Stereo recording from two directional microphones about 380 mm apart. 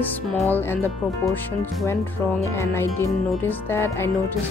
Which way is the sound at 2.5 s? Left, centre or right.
Centre.